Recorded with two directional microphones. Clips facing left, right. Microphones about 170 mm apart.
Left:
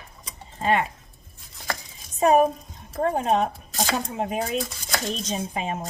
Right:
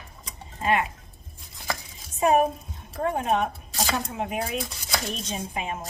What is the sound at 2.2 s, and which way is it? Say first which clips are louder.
Speech: left 3 dB; 35° left (ahead or behind).